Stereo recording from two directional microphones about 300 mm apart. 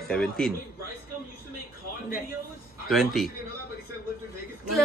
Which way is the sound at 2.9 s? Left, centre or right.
Centre.